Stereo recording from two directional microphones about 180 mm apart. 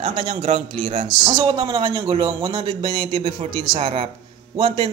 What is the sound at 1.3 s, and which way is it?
Speech, 25° right (ahead or behind).